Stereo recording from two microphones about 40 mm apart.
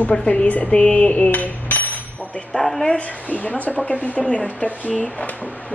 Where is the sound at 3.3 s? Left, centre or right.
Left.